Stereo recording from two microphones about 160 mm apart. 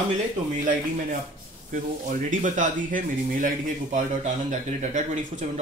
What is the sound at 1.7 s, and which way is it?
Speech, 55° right (ahead or behind).